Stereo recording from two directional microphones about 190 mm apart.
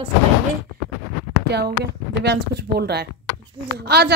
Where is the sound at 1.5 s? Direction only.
60° right (ahead or behind).